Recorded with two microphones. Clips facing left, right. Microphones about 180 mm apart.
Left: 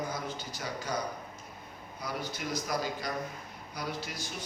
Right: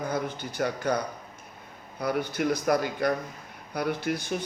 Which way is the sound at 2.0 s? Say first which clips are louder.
Right 10 dB; 60° right (ahead or behind).